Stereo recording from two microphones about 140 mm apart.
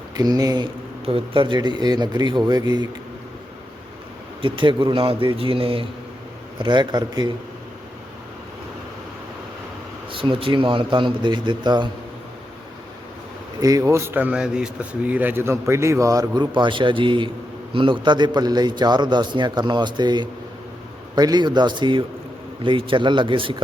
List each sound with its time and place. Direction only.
0.2 s speech: 25° right (ahead or behind)
1.0 s a man's voice: 40° right (ahead or behind)
4.4 s a man's voice: 35° right (ahead or behind)
10.1 s a man's voice: 40° right (ahead or behind)
13.6 s a man's voice: 25° right (ahead or behind)